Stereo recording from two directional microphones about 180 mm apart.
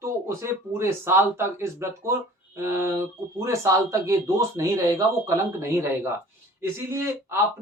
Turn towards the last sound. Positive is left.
turn(degrees=-15)  # may be behind; listen again after turning